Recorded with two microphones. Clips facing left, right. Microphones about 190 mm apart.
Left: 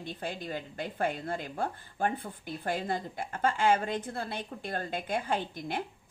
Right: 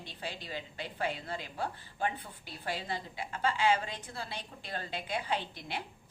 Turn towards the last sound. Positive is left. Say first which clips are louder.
# left 4 dB
turn(degrees=50)  # may be behind; listen again after turning